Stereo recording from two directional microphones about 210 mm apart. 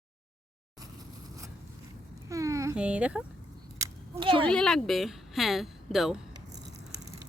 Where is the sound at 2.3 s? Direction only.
15° right (ahead or behind).